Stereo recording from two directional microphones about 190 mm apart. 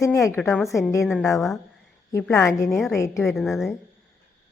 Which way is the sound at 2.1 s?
10° left (ahead or behind).